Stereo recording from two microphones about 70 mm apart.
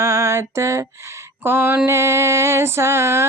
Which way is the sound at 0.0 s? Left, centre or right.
Right.